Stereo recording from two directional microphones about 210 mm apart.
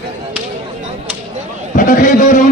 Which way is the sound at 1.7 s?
40° left (ahead or behind).